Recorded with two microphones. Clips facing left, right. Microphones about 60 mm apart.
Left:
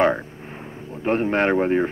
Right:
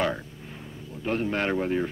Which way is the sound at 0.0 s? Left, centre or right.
Left.